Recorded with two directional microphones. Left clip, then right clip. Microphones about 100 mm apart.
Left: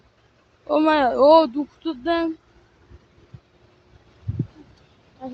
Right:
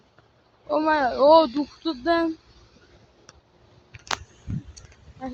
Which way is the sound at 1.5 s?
5° right (ahead or behind).